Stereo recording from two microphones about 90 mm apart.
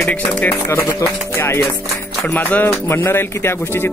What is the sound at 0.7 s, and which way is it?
Speech, 30° left (ahead or behind).